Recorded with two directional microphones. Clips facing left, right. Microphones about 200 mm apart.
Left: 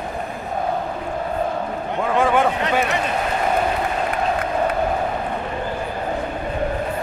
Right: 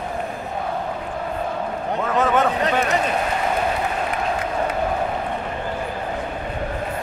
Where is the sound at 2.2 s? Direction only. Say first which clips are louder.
Left 1 dB; 10° left (ahead or behind).